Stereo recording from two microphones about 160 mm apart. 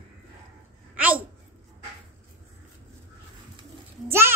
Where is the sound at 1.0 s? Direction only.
10° right (ahead or behind).